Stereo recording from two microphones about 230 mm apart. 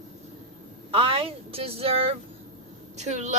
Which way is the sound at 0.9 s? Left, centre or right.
Right.